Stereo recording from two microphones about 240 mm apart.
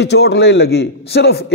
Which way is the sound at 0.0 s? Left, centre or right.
Left.